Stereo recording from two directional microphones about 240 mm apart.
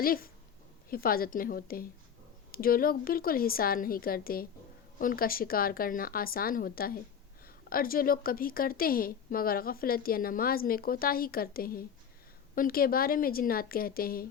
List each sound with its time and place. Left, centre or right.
0.9 s a woman's voice: left